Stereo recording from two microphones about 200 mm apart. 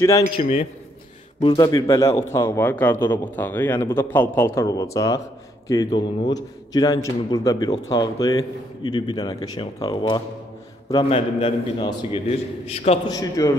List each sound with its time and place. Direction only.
0.0 s a man's voice: 15° left (ahead or behind)
0.3 s speech: 35° left (ahead or behind)
1.4 s a man's voice: 20° left (ahead or behind)
13.1 s a man's voice: 15° left (ahead or behind)